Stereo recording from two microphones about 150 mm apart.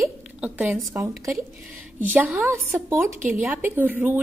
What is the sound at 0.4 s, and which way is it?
Speech, 10° right (ahead or behind).